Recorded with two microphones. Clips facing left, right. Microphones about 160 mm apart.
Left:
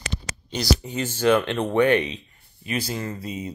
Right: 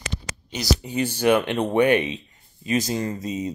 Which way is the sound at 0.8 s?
15° right (ahead or behind).